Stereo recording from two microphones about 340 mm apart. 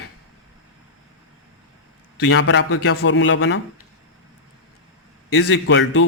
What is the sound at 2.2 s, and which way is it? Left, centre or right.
Speech, left.